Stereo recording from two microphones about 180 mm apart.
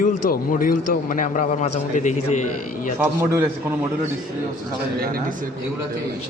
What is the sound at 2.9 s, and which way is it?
Speech, 15° right (ahead or behind).